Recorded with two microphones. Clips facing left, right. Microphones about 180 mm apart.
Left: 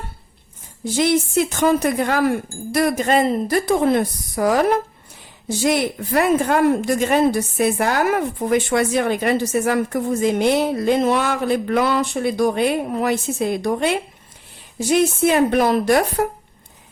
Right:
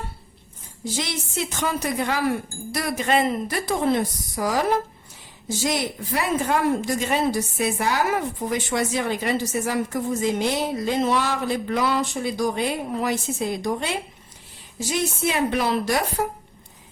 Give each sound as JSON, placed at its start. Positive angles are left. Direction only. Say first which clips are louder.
{"t": 0.9, "sound": "a woman's voice", "louder": "left 12 dB", "side_deg": 55}
{"t": 3.7, "sound": "a woman's voice", "louder": "left 3 dB", "side_deg": 55}